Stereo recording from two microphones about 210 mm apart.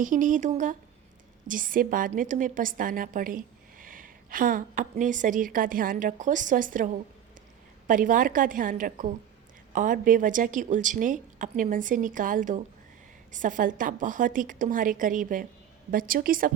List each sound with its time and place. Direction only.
0.0 s a woman's voice: 40° right (ahead or behind)